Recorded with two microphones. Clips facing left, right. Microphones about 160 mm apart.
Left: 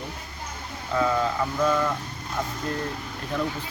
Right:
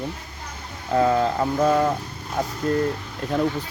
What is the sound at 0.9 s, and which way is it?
Speech, 50° right (ahead or behind).